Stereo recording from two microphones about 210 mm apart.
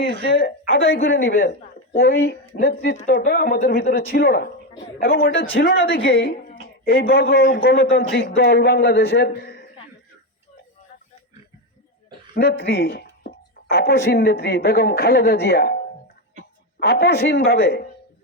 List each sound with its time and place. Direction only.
0.0 s speech: 50° left (ahead or behind)
1.0 s speech: 55° left (ahead or behind)
12.3 s speech: 50° left (ahead or behind)
16.8 s speech: 50° left (ahead or behind)